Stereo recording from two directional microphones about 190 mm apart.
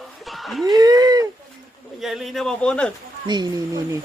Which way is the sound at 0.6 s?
20° right (ahead or behind).